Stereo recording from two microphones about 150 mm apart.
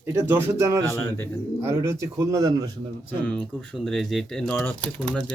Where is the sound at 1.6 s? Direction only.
20° right (ahead or behind).